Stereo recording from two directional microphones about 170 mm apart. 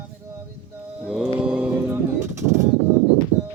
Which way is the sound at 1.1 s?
5° right (ahead or behind).